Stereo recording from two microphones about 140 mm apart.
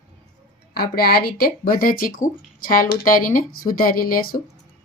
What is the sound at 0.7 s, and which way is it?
Speech, 90° left.